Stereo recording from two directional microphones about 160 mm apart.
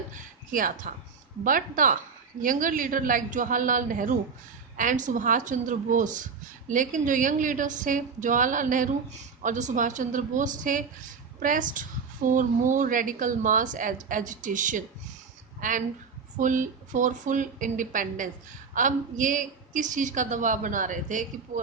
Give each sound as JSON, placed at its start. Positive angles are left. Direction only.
{"t": 0.1, "sound": "a woman's voice", "side_deg": -55}